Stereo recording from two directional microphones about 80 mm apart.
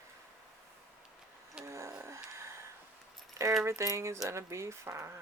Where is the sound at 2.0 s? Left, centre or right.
Right.